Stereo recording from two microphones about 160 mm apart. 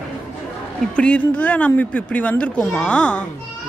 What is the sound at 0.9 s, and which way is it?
Speech, 10° left (ahead or behind).